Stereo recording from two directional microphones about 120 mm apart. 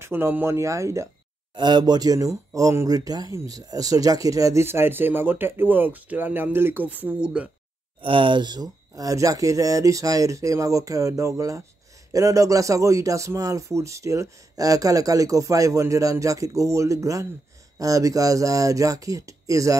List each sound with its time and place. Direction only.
0.0 s speech: 20° right (ahead or behind)
1.5 s speech: 40° right (ahead or behind); by 7.4 s 10° right (ahead or behind)
8.0 s speech: 45° right (ahead or behind); by 19.8 s 25° right (ahead or behind)